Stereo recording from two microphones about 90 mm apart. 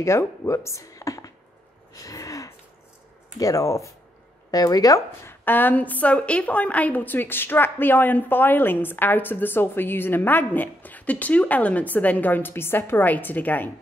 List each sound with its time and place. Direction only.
0.0 s speech: 30° left (ahead or behind)
2.0 s gasp: 40° left (ahead or behind)
3.3 s speech: 40° left (ahead or behind)
5.2 s a woman's voice: 25° left (ahead or behind)